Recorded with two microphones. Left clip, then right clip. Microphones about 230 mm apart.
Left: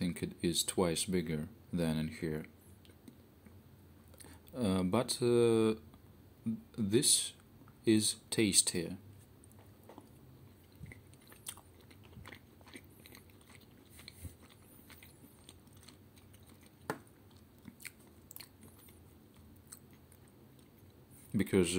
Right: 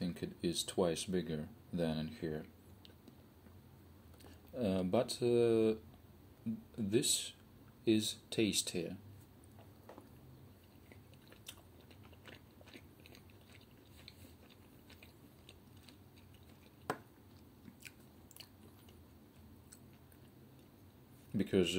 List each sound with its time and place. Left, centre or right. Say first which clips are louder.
0.0 s speech: left 3 dB; left
4.2 s speech: left 1 dB; left
12.3 s biting: left 3 dB; left
21.3 s a sound: left 2 dB; left